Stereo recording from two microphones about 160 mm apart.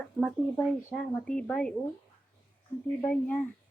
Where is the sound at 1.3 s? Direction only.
5° left (ahead or behind).